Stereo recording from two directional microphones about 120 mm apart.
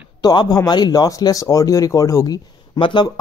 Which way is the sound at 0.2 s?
35° left (ahead or behind).